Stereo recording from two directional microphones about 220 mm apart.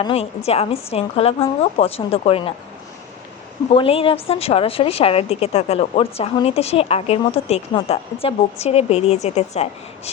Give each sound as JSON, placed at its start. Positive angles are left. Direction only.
{"t": 0.0, "sound": "a woman's voice", "side_deg": 25}
{"t": 3.7, "sound": "a woman's voice", "side_deg": 25}